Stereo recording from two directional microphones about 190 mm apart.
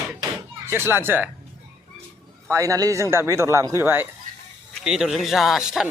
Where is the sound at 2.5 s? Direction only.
15° right (ahead or behind).